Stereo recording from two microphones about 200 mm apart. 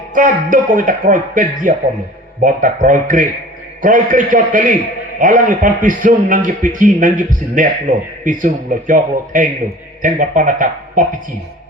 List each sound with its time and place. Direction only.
0.1 s a man's voice: 40° right (ahead or behind)